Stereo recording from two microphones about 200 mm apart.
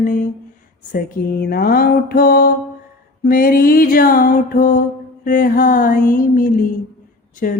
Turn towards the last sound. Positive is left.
turn(degrees=45)  # may be behind; listen again after turning